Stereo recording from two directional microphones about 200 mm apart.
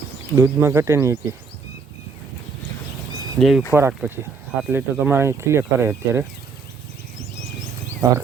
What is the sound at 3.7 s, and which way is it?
Speech, 10° right (ahead or behind).